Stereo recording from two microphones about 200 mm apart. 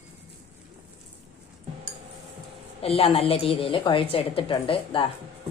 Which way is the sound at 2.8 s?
30° left (ahead or behind).